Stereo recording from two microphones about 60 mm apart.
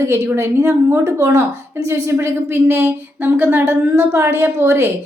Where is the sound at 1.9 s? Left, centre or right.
Right.